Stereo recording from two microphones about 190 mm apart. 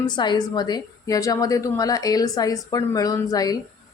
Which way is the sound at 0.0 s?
20° left (ahead or behind).